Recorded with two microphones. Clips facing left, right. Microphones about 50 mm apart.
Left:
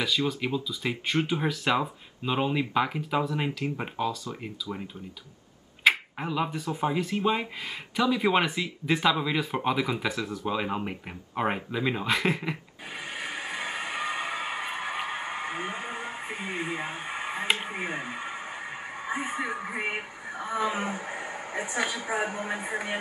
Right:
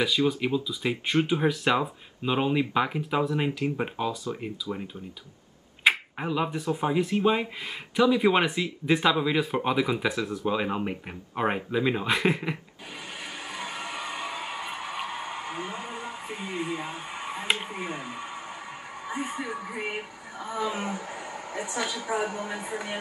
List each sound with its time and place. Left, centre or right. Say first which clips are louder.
0.0 s speech: right 3 dB; centre
5.9 s speech: even; centre
13.2 s a sound: left 3 dB; left
17.6 s speech: left 1 dB; left